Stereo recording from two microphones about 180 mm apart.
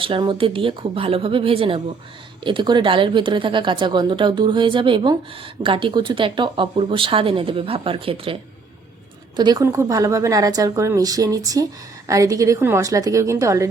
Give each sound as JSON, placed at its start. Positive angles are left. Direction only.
{"t": 0.0, "sound": "a woman's voice", "side_deg": -30}